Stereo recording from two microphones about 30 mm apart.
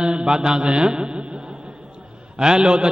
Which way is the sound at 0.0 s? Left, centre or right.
Right.